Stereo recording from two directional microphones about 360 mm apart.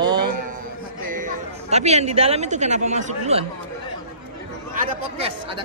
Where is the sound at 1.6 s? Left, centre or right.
Centre.